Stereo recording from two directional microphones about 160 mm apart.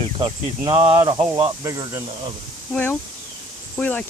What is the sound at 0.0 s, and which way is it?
Speech, 30° right (ahead or behind).